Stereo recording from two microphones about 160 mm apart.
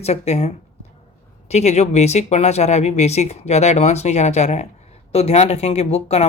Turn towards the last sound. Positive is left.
turn(degrees=40)  # may be behind; listen again after turning